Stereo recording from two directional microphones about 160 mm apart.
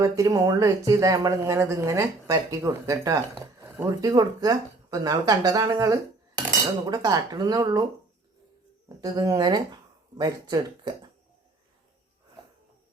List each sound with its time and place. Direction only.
0.0 s speech: 20° right (ahead or behind)
4.1 s speech: 25° right (ahead or behind)
9.0 s speech: 25° right (ahead or behind)